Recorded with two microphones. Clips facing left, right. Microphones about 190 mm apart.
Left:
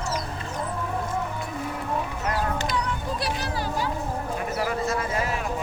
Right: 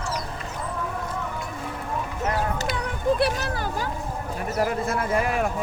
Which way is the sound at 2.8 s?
55° right (ahead or behind).